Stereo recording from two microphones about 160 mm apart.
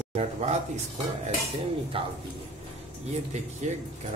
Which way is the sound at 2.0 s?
35° right (ahead or behind).